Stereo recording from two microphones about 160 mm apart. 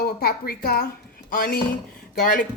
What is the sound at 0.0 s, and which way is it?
Speech, 75° left (ahead or behind).